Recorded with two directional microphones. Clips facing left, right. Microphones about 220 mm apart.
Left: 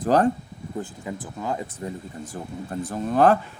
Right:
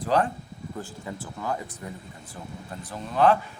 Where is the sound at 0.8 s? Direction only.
15° left (ahead or behind).